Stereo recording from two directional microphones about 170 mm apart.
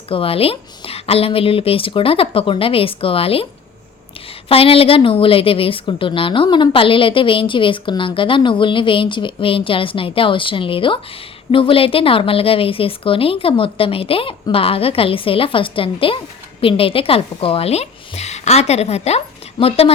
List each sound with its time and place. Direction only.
0.1 s a woman's voice: 35° left (ahead or behind)
4.4 s a woman's voice: 35° left (ahead or behind)